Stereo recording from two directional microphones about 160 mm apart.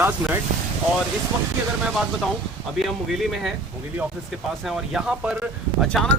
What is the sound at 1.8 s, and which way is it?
Speech, 5° right (ahead or behind).